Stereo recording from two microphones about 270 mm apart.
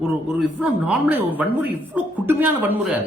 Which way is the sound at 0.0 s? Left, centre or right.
Centre.